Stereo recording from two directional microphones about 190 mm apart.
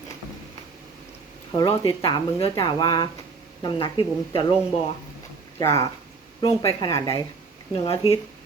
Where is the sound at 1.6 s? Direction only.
25° left (ahead or behind).